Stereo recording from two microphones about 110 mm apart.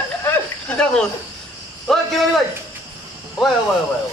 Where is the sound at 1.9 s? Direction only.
5° left (ahead or behind).